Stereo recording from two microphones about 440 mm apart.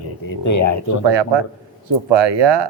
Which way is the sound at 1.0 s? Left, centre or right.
Right.